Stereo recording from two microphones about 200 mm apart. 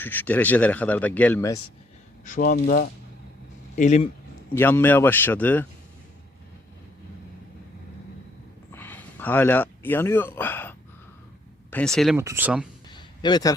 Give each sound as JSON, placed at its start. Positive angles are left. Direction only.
{"t": 0.0, "sound": "speech", "side_deg": 10}
{"t": 2.2, "sound": "speech", "side_deg": 40}
{"t": 4.5, "sound": "speech", "side_deg": 10}
{"t": 8.7, "sound": "speech", "side_deg": 10}
{"t": 12.1, "sound": "speech", "side_deg": -10}
{"t": 12.9, "sound": "a sound", "side_deg": 20}